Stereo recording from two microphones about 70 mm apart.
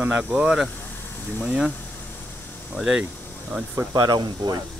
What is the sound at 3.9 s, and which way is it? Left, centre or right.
Speech, right.